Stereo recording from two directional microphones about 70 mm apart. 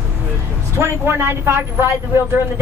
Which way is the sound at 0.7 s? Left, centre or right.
Right.